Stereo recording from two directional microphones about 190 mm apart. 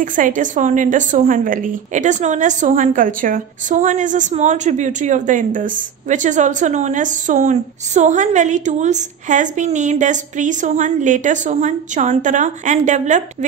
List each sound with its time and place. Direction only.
0.0 s a woman's voice: 45° right (ahead or behind)